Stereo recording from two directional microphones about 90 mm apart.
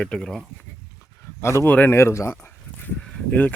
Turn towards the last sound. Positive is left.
turn(degrees=15)  # may be behind; listen again after turning